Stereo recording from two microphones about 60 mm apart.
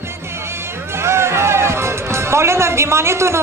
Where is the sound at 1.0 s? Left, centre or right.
Right.